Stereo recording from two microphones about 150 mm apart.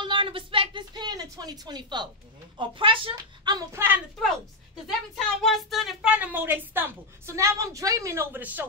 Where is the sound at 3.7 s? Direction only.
15° right (ahead or behind).